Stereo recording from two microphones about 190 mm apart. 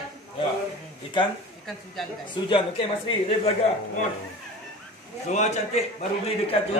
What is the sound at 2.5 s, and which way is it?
Speech, 30° left (ahead or behind).